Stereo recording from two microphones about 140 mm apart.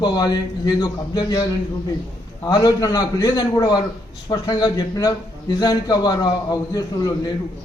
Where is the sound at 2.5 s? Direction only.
30° left (ahead or behind).